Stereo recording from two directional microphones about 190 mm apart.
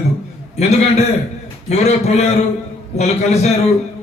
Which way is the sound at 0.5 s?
35° left (ahead or behind).